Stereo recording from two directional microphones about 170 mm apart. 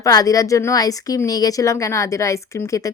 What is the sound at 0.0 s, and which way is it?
Speech, 20° left (ahead or behind).